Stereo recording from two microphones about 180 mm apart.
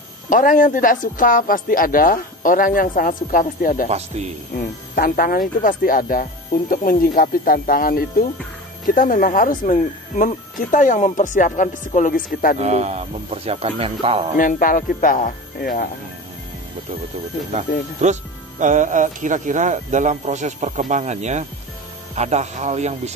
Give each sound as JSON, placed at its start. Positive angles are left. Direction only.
{"t": 0.3, "sound": "speech", "side_deg": 50}
{"t": 4.9, "sound": "speech", "side_deg": 55}
{"t": 12.5, "sound": "speech", "side_deg": -40}
{"t": 14.3, "sound": "speech", "side_deg": 50}
{"t": 18.0, "sound": "speech", "side_deg": -40}